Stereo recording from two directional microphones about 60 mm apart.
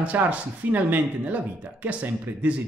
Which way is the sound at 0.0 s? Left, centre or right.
Right.